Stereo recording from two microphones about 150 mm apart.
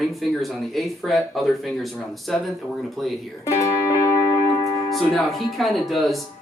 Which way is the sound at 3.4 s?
20° left (ahead or behind).